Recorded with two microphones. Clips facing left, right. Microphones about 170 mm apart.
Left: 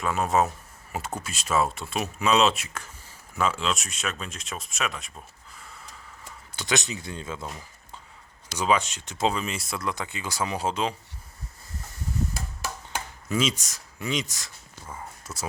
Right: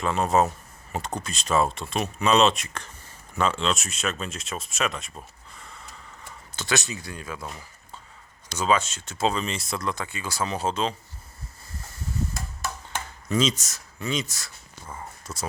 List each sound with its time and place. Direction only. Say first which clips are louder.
0.0 s speech: right 2 dB; 5° left (ahead or behind)
6.6 s speech: even; 20° left (ahead or behind)
8.5 s speech: right 1 dB; 15° left (ahead or behind)
9.4 s speech: right 2 dB; 5° left (ahead or behind)
9.8 s speech: right 1 dB; 15° left (ahead or behind)
13.2 s speech: right 2 dB; 10° left (ahead or behind)
14.8 s speech: right 1 dB; centre (ahead or behind)